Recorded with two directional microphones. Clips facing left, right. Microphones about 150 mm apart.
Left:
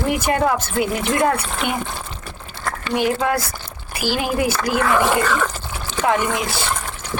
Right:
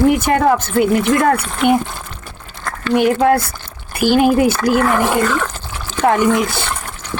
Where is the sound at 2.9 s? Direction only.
55° right (ahead or behind).